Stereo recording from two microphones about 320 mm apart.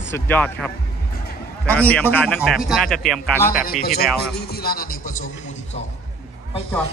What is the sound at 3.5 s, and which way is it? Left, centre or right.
Speech, left.